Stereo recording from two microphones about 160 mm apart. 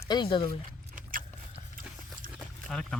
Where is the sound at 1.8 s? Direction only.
60° right (ahead or behind).